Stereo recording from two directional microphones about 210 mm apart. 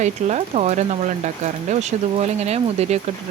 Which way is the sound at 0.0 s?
30° right (ahead or behind).